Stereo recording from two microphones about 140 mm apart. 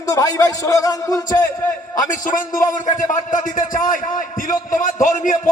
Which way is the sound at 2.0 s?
70° left (ahead or behind).